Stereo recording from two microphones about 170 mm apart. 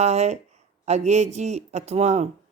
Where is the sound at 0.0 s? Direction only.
40° right (ahead or behind).